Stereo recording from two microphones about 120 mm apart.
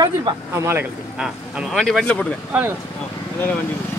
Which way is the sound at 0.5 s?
20° right (ahead or behind).